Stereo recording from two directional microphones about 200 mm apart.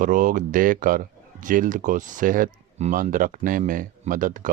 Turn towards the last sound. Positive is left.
turn(degrees=-40)  # may be behind; listen again after turning